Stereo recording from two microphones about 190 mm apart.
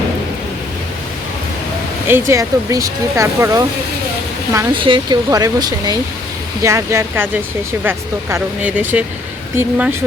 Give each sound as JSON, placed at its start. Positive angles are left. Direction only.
{"t": 2.0, "sound": "speech", "side_deg": -15}